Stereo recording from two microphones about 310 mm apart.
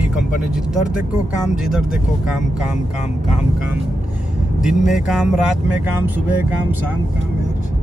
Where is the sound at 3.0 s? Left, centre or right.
Left.